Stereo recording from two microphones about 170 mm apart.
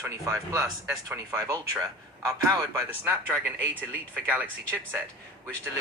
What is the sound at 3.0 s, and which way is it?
Speech, 15° right (ahead or behind).